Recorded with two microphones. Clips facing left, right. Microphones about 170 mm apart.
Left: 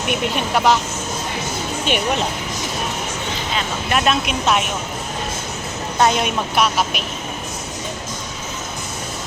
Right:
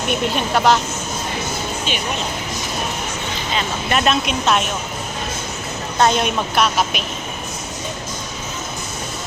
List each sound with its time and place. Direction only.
0.1 s speech: 10° left (ahead or behind)
1.9 s speech: 65° left (ahead or behind)
3.5 s speech: centre (ahead or behind)
6.0 s speech: 5° left (ahead or behind)